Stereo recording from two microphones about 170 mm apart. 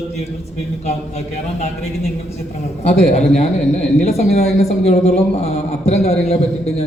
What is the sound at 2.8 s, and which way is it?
A man's voice, 40° left (ahead or behind).